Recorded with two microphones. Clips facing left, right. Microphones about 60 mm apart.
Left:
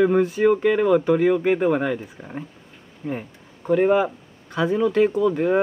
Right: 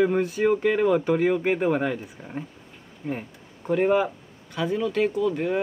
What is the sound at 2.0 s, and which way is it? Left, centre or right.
Speech, centre.